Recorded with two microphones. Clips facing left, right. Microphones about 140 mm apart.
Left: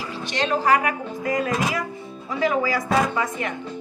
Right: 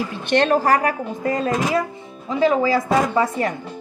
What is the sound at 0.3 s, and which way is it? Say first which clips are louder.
Speech: right 7 dB; 55° right (ahead or behind).